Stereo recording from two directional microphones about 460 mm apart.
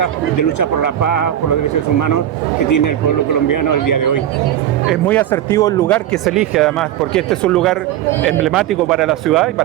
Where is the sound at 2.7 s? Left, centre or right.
Left.